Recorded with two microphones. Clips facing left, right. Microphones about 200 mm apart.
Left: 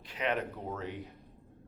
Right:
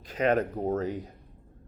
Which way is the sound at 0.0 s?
45° right (ahead or behind).